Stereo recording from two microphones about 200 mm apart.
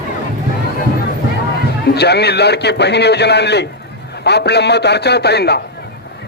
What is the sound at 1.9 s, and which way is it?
A man's voice, 55° left (ahead or behind).